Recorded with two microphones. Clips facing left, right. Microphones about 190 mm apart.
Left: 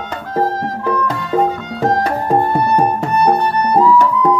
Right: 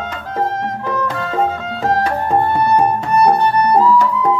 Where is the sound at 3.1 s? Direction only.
30° right (ahead or behind).